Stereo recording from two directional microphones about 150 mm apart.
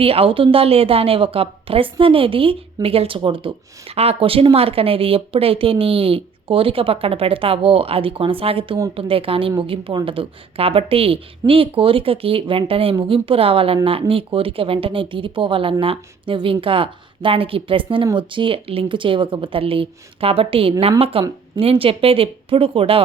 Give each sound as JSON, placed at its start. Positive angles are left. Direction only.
{"t": 0.0, "sound": "speech", "side_deg": -40}